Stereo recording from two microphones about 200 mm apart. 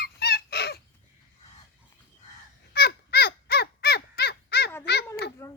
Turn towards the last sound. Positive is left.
turn(degrees=10)  # may be behind; listen again after turning